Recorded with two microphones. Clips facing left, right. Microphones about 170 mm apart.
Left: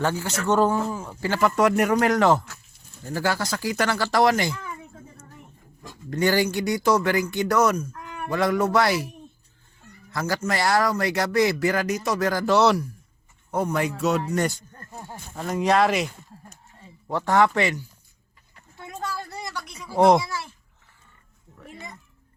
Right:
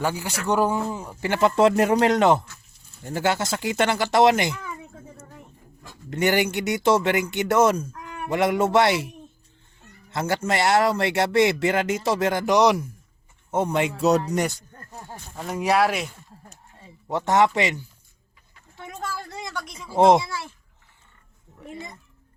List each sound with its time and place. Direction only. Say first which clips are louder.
0.0 s speech: left 1 dB; 10° right (ahead or behind)
6.1 s speech: even; 20° right (ahead or behind)
10.1 s speech: right 2 dB; 25° right (ahead or behind)
15.4 s speech: left 1 dB; 5° right (ahead or behind)
17.1 s speech: right 1 dB; 20° right (ahead or behind)
19.7 s speech: right 1 dB; 25° right (ahead or behind)